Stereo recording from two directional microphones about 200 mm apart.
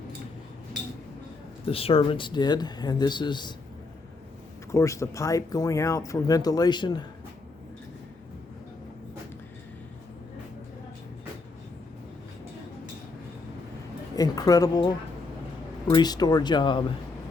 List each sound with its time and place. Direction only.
1.6 s speech: 30° left (ahead or behind)
4.7 s speech: 15° left (ahead or behind)
14.2 s a woman's voice: 20° left (ahead or behind)